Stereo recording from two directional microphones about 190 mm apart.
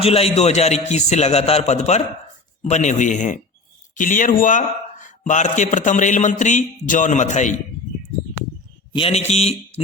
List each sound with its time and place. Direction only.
0.0 s a man's voice: 30° left (ahead or behind)
9.0 s a man's voice: 30° left (ahead or behind)